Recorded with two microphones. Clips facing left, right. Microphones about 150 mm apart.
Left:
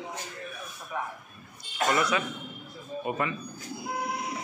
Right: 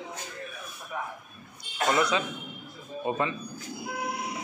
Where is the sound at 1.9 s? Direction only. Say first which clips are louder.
Right 1 dB; 20° right (ahead or behind).